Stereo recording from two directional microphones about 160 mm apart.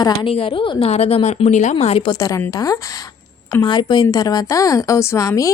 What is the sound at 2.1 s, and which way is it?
A woman's voice, 20° left (ahead or behind).